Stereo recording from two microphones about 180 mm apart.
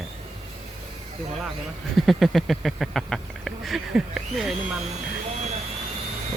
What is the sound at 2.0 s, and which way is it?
Speech, centre (ahead or behind).